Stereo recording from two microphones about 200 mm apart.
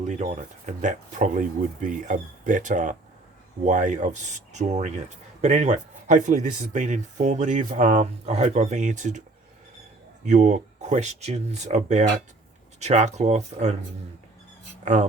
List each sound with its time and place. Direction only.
0.0 s speech: 35° right (ahead or behind)
10.2 s speech: 35° right (ahead or behind)